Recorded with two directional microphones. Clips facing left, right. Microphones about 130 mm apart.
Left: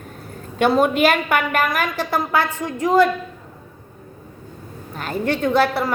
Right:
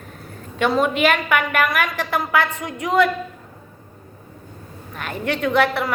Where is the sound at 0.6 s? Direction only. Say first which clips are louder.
Left 2 dB; 40° left (ahead or behind).